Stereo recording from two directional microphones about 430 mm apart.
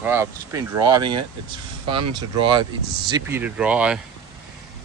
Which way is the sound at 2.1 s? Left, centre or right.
Centre.